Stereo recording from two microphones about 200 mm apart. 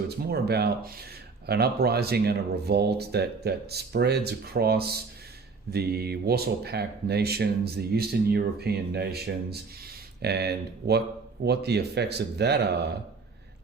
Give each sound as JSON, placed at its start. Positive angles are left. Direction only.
{"t": 0.2, "sound": "speech", "side_deg": -55}